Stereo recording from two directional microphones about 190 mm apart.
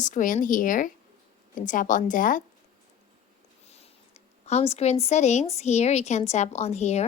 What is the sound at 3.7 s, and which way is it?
A woman's voice, 35° left (ahead or behind).